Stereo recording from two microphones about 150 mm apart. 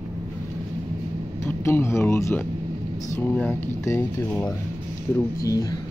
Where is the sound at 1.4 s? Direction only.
15° left (ahead or behind).